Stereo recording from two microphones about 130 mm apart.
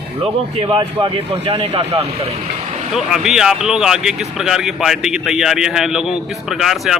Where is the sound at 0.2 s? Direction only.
45° right (ahead or behind).